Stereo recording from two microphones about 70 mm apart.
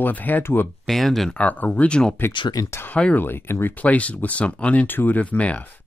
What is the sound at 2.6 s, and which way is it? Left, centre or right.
Speech, left.